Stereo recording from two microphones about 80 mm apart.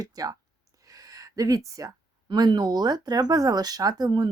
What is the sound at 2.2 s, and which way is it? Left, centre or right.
Speech, right.